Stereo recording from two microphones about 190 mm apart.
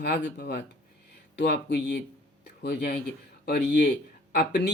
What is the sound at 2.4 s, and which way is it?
Music, 55° left (ahead or behind).